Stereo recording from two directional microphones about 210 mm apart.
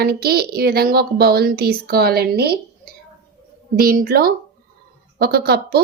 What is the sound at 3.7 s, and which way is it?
Speech, 45° right (ahead or behind).